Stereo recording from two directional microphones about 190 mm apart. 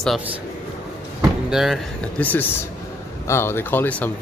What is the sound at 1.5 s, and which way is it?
Speech, centre (ahead or behind).